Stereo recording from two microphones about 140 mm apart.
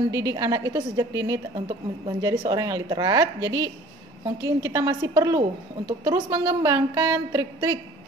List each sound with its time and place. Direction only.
0.1 s a woman's voice: 25° right (ahead or behind)